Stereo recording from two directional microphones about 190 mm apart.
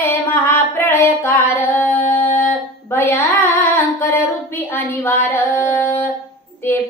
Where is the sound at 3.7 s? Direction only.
10° left (ahead or behind).